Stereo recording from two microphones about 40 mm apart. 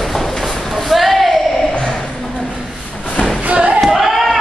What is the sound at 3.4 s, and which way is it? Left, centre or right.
Thump, right.